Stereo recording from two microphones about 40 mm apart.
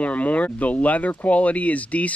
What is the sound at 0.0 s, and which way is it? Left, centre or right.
Speech, left.